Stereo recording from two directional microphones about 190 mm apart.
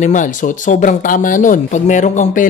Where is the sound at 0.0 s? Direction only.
40° left (ahead or behind).